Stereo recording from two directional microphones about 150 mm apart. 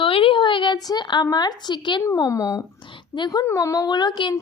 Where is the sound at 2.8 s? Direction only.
35° left (ahead or behind).